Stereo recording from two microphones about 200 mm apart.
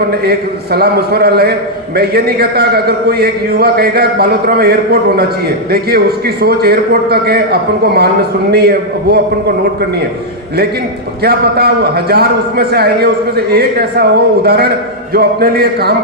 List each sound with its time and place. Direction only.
0.3 s a man's voice: 50° right (ahead or behind)
11.2 s a man's voice: 50° right (ahead or behind)